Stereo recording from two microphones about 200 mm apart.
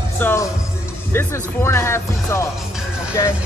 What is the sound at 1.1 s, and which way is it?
Speech, 10° left (ahead or behind).